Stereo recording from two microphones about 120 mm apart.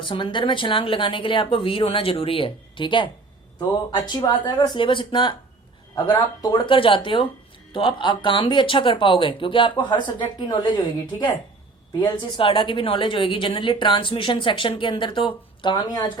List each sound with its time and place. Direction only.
0.0 s a woman's voice: 45° left (ahead or behind)
4.4 s speech: 40° left (ahead or behind)
5.9 s a woman's voice: 35° left (ahead or behind)